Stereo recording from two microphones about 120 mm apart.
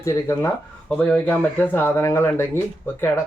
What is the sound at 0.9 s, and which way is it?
Speech, 10° left (ahead or behind).